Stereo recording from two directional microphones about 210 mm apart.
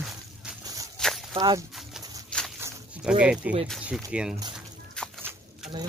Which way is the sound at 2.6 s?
10° right (ahead or behind).